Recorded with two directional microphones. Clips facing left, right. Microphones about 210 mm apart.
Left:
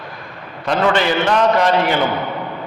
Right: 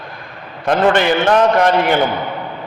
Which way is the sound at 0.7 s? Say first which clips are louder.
Right 3 dB; 50° right (ahead or behind).